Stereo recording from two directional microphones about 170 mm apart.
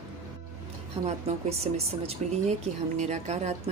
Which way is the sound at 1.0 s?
35° right (ahead or behind).